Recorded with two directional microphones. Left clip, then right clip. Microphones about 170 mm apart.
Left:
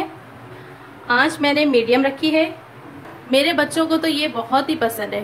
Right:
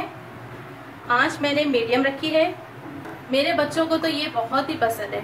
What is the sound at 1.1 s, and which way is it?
A woman's voice, 50° left (ahead or behind).